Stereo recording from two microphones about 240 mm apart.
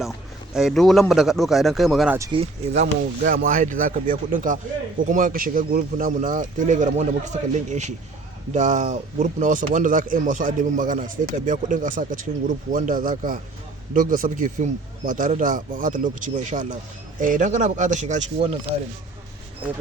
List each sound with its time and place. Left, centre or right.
0.5 s speech: centre
2.1 s speech: centre
2.4 s speech: right
19.6 s speech: centre